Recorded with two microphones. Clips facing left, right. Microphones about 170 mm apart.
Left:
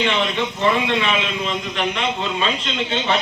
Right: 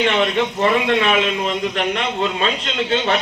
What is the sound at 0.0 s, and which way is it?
A man's voice, 45° right (ahead or behind).